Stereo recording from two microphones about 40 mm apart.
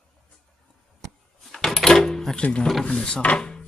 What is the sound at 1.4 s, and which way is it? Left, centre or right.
Drawer open or close, centre.